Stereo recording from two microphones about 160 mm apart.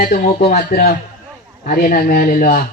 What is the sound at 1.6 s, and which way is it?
Speech, 60° left (ahead or behind).